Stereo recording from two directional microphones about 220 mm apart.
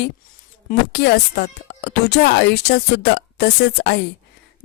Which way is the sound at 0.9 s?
50° left (ahead or behind).